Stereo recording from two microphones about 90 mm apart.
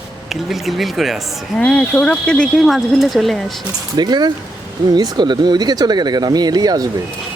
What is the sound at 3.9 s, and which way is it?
Speech, 50° right (ahead or behind).